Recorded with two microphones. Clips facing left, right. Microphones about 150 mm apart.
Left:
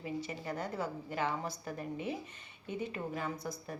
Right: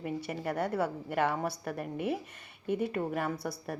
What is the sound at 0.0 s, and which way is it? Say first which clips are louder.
A woman's voice: right 4 dB; 60° right (ahead or behind).